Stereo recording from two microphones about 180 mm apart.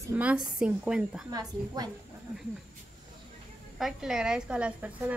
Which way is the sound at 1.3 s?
20° right (ahead or behind).